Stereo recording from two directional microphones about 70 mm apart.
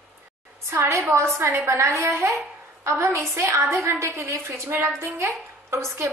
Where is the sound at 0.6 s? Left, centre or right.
Right.